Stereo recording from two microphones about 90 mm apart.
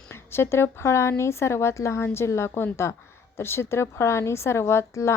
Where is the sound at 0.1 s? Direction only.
25° left (ahead or behind).